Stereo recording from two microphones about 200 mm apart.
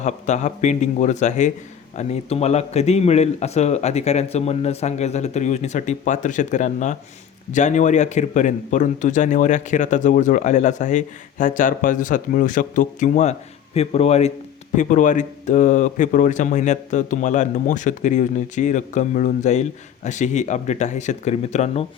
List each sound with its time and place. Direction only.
0.0 s a man's voice: 35° left (ahead or behind)